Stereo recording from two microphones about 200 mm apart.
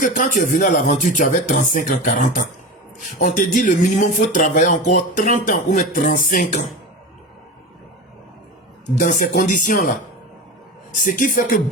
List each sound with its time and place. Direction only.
0.0 s speech: 40° left (ahead or behind)
9.0 s speech: 40° left (ahead or behind)
11.0 s a man's voice: 40° left (ahead or behind)